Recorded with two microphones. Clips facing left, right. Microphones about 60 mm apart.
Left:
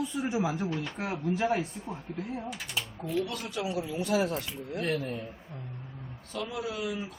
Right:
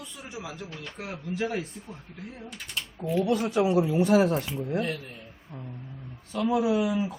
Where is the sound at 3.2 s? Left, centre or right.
Right.